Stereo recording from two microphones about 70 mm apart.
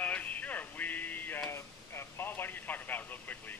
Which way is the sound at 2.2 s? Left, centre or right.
Left.